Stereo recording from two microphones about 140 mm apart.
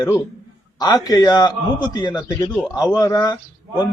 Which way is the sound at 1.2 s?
30° left (ahead or behind).